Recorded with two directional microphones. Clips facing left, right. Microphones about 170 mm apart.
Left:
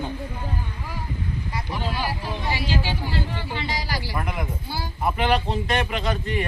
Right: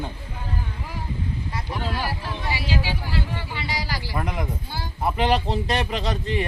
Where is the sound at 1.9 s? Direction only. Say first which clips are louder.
Even; centre (ahead or behind).